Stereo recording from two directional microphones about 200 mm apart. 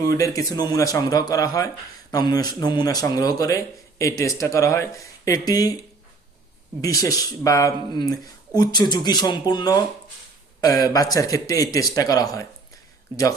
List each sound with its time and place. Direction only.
0.2 s speech: 15° left (ahead or behind)
6.8 s speech: 15° left (ahead or behind)